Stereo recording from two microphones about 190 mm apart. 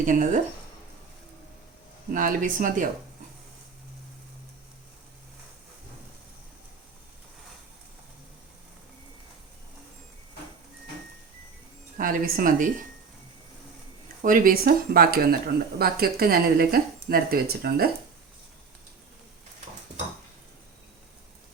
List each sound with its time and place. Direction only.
0.0 s speech: 45° right (ahead or behind)
2.1 s speech: 45° right (ahead or behind)
11.9 s speech: 45° right (ahead or behind)
14.2 s speech: 45° right (ahead or behind)